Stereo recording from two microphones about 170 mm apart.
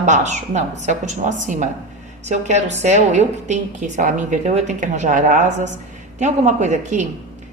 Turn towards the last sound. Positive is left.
turn(degrees=-45)  # may be behind; listen again after turning